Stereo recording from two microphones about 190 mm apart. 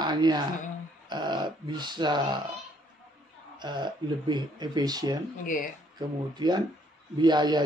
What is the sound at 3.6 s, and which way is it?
A man's voice, 25° right (ahead or behind).